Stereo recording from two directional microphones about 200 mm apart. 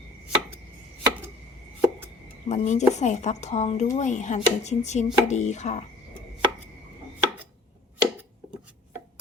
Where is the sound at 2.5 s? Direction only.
35° left (ahead or behind).